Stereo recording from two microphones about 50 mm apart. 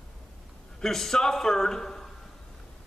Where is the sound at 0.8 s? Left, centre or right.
Centre.